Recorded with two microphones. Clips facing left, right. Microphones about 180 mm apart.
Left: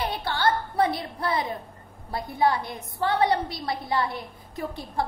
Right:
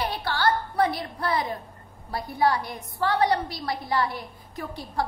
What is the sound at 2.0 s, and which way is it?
A woman's voice, 20° left (ahead or behind).